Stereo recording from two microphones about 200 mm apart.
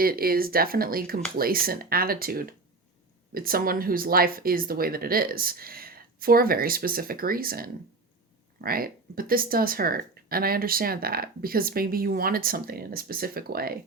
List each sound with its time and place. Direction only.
0.0 s speech: 50° right (ahead or behind)